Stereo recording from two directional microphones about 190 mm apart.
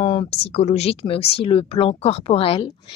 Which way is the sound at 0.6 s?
35° left (ahead or behind).